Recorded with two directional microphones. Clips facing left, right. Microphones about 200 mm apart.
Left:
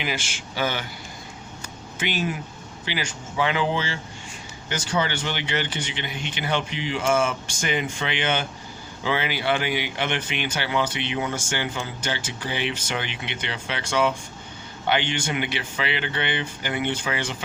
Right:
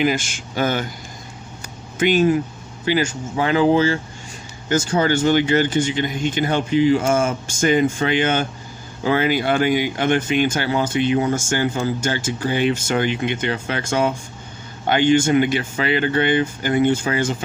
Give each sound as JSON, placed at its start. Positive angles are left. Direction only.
{"t": 0.0, "sound": "speech", "side_deg": -45}
{"t": 2.0, "sound": "speech", "side_deg": -50}